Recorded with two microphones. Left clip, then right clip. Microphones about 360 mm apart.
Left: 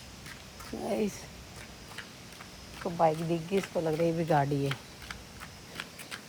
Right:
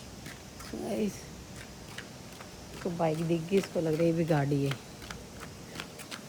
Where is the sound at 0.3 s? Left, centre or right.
Centre.